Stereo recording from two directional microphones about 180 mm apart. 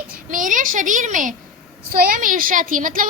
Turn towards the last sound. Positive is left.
turn(degrees=-50)  # may be behind; listen again after turning